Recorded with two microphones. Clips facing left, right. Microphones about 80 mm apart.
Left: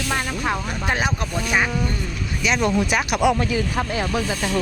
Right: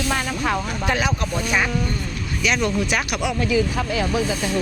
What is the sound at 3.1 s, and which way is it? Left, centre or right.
Speech, left.